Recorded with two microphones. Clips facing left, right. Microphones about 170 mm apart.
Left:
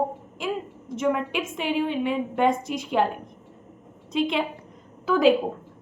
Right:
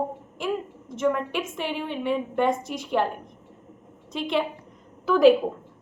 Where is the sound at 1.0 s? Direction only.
10° left (ahead or behind).